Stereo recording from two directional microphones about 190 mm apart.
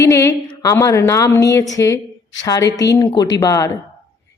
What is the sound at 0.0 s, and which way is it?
A woman's voice, 15° left (ahead or behind).